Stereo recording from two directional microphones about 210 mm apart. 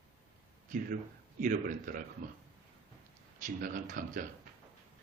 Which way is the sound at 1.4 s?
40° right (ahead or behind).